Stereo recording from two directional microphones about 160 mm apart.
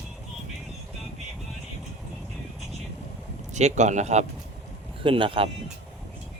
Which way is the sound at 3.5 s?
45° right (ahead or behind).